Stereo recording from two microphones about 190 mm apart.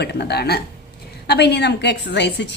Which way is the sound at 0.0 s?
60° left (ahead or behind).